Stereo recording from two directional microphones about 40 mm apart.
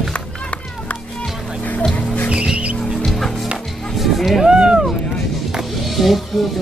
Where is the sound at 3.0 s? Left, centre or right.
Centre.